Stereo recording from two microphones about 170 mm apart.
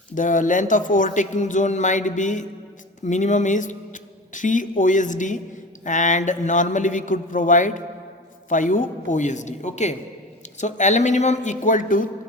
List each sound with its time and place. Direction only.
0.1 s speech: 50° left (ahead or behind)